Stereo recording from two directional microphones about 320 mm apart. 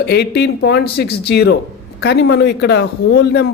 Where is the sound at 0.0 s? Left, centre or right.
Left.